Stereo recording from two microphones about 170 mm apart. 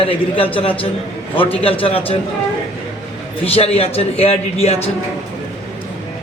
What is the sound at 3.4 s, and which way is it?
A man's voice, 35° left (ahead or behind).